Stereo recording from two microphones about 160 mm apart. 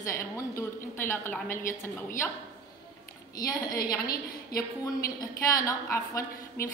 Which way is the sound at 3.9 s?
20° left (ahead or behind).